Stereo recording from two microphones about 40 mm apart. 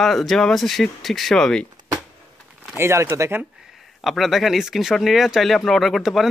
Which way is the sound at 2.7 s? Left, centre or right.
Right.